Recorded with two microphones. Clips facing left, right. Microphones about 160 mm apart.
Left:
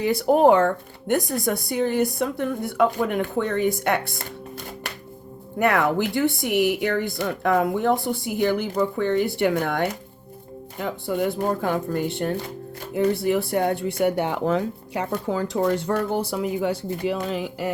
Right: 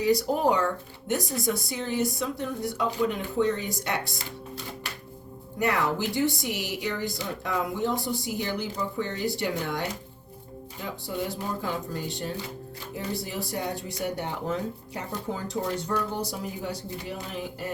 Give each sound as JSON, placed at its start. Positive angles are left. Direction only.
{"t": 0.0, "sound": "speech", "side_deg": 55}